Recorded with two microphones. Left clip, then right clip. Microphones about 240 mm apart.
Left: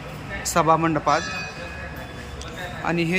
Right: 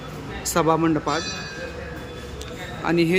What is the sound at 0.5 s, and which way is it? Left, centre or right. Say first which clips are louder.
Speech: left 1 dB; centre.